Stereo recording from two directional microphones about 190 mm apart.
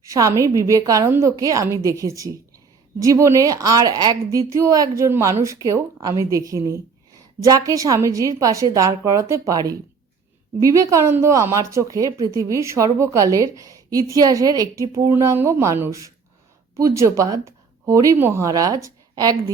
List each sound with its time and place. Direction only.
0.0 s speech: 15° right (ahead or behind)